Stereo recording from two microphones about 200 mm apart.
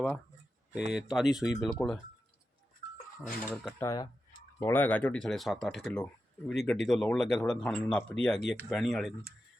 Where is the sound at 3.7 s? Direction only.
15° left (ahead or behind).